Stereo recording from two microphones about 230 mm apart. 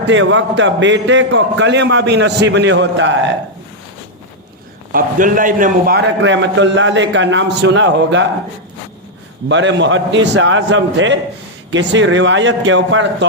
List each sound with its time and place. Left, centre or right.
0.1 s a man's voice: right
4.9 s a man's voice: right
9.5 s a man's voice: right